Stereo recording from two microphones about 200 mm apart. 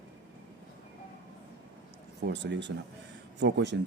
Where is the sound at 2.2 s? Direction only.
60° right (ahead or behind).